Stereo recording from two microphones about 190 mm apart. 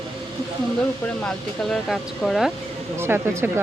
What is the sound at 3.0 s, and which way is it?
Speech, 10° right (ahead or behind).